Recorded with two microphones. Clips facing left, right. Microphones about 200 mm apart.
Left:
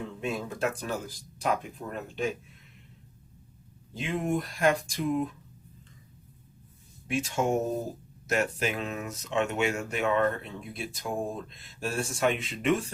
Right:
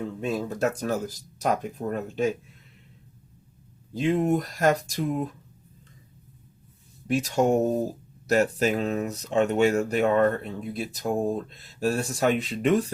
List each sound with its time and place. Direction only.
0.2 s speech: 40° right (ahead or behind)
3.9 s speech: 40° right (ahead or behind)
7.1 s speech: 35° right (ahead or behind)